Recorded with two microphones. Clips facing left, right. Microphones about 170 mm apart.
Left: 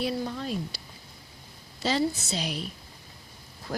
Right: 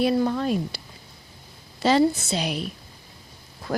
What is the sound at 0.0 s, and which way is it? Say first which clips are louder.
Speech: right 9 dB; 65° right (ahead or behind).